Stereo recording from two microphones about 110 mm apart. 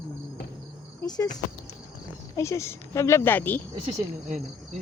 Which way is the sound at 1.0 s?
35° left (ahead or behind).